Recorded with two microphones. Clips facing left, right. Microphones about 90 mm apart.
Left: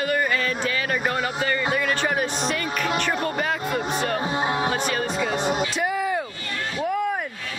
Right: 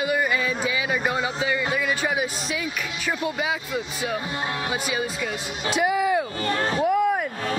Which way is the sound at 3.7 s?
50° left (ahead or behind).